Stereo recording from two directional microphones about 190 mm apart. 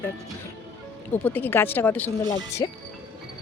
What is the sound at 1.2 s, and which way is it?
Speech, 10° left (ahead or behind).